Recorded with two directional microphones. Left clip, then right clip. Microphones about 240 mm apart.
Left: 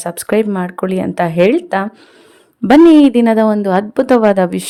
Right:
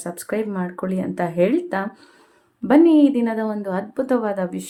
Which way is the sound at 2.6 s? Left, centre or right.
Left.